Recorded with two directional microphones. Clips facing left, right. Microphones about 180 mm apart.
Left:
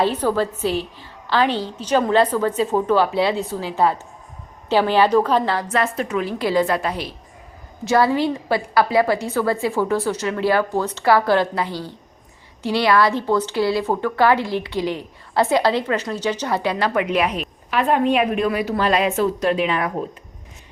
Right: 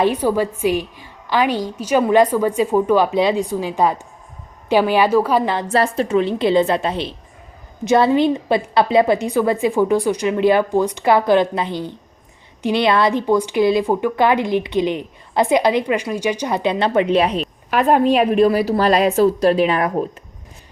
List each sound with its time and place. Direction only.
0.0 s a woman's voice: 10° right (ahead or behind)
5.7 s a woman's voice: 30° right (ahead or behind)
17.7 s a woman's voice: 45° right (ahead or behind)